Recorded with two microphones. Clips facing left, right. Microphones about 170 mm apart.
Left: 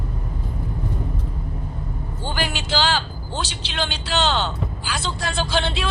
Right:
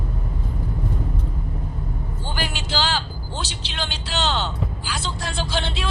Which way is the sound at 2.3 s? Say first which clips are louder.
Left 3 dB; 70° left (ahead or behind).